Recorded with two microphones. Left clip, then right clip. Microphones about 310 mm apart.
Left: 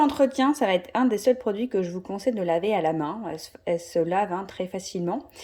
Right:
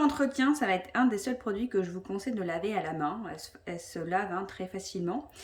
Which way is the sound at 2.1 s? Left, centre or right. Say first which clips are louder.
Left 10 dB; centre.